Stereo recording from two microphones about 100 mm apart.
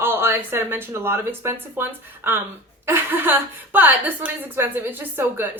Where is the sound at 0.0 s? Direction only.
25° right (ahead or behind).